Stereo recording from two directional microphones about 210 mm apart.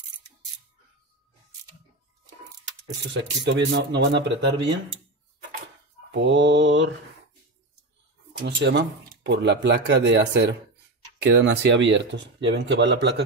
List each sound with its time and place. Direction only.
3.1 s speech: 60° right (ahead or behind)
6.1 s speech: 60° right (ahead or behind)
8.3 s speech: 55° right (ahead or behind)